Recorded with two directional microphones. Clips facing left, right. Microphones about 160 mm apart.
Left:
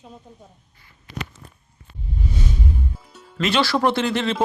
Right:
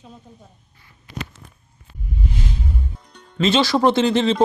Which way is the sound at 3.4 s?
20° right (ahead or behind).